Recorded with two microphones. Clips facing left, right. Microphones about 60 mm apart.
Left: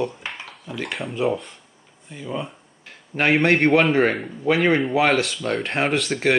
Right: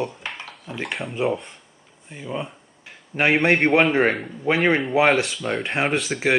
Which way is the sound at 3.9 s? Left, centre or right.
Centre.